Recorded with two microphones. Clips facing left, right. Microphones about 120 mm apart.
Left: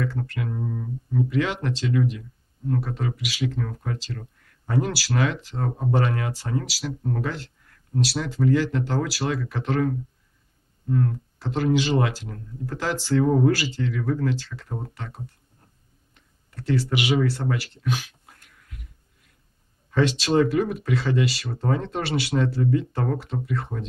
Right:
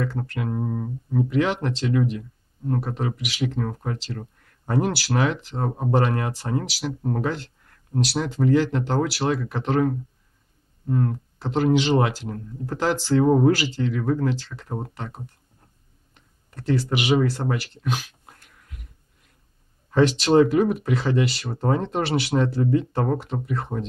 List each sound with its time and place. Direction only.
0.0 s speech: 30° right (ahead or behind)
3.3 s speech: 25° right (ahead or behind)
4.7 s speech: 50° right (ahead or behind)
5.1 s speech: 30° right (ahead or behind)
17.4 s speech: 30° right (ahead or behind)
19.9 s speech: 35° right (ahead or behind)